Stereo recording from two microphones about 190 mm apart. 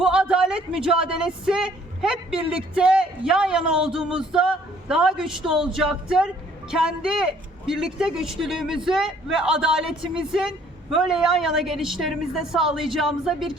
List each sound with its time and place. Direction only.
0.0 s speech: 5° right (ahead or behind)